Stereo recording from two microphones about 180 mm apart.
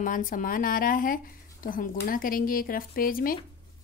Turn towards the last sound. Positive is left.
turn(degrees=55)  # may be behind; listen again after turning